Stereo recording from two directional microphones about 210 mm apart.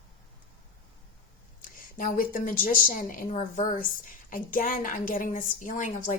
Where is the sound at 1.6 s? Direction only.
40° left (ahead or behind).